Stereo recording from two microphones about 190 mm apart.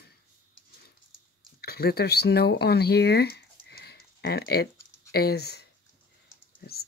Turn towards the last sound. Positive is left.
turn(degrees=55)  # may be behind; listen again after turning